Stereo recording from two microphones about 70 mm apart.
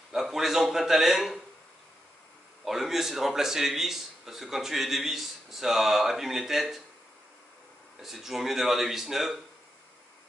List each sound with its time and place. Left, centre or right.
0.1 s a man's voice: centre
2.6 s a man's voice: centre
8.0 s a man's voice: centre